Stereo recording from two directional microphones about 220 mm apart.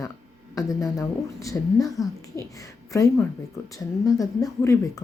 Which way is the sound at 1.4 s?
15° left (ahead or behind).